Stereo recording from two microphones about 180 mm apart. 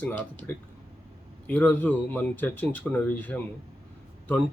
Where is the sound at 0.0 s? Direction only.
10° left (ahead or behind).